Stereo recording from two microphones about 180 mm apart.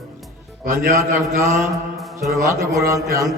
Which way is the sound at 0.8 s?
55° right (ahead or behind).